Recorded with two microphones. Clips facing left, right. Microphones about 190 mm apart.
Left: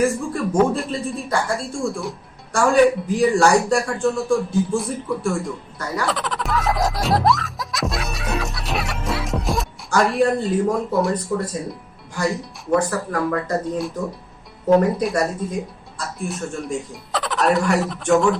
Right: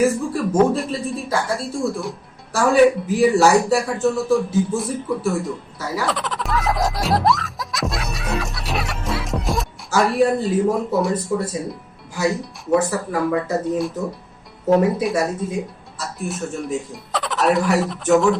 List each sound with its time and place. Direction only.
0.0 s speech: centre (ahead or behind)
6.0 s music: centre (ahead or behind)
11.3 s speech: 10° right (ahead or behind)